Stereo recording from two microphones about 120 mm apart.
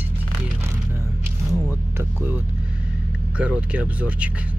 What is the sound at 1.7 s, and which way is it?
Music, 15° right (ahead or behind).